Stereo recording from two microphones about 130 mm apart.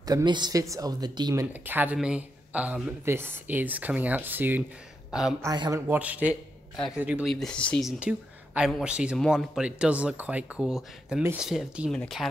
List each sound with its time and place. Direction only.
0.0 s speech: 30° right (ahead or behind); by 4.6 s 15° right (ahead or behind)
5.4 s speech: 25° right (ahead or behind)
5.9 s speech: 10° right (ahead or behind)
7.3 s speech: 5° left (ahead or behind)
7.8 s speech: 10° right (ahead or behind)